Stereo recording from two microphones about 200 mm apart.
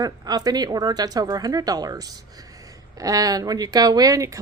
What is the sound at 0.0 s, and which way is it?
A woman's voice, 20° right (ahead or behind).